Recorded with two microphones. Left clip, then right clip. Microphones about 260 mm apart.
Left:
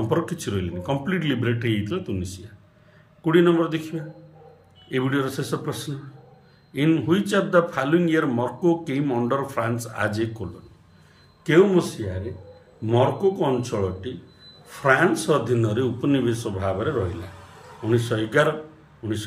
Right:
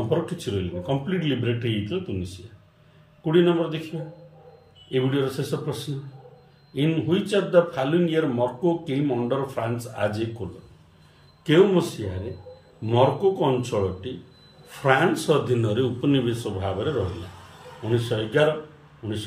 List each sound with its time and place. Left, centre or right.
0.1 s a man's voice: centre
4.9 s a man's voice: centre
11.4 s a man's voice: centre
12.8 s a man's voice: centre
17.9 s a man's voice: centre